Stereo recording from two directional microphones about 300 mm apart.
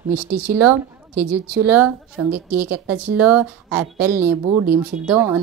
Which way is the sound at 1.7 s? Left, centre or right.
Centre.